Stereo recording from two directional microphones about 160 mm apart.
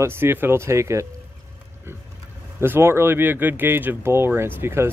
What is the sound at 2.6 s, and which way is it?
Speech, 15° right (ahead or behind).